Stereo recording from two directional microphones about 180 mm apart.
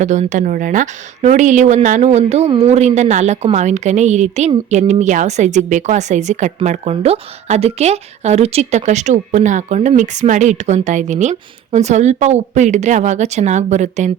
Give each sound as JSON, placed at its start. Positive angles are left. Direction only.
{"t": 0.0, "sound": "a woman's voice", "side_deg": -40}